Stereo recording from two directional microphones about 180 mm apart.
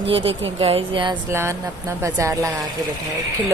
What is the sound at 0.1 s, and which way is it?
Speech, 30° right (ahead or behind).